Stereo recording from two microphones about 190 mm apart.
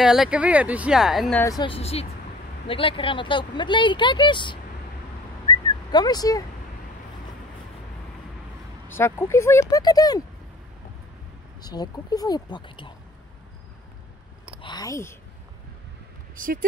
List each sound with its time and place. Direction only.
0.0 s speech: centre (ahead or behind)
1.6 s speech: 30° left (ahead or behind)
5.5 s whistling: 20° left (ahead or behind)
8.8 s speech: 10° left (ahead or behind)
11.6 s speech: 20° left (ahead or behind)
14.6 s speech: 20° left (ahead or behind)